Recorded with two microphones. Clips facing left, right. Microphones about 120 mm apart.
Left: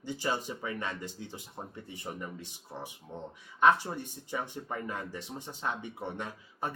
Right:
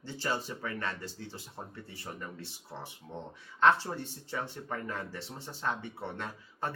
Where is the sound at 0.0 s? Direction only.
15° left (ahead or behind).